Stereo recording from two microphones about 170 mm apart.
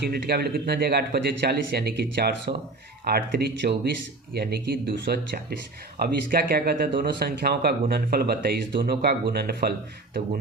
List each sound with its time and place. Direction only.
0.0 s speech: 65° right (ahead or behind)
3.0 s speech: 60° right (ahead or behind)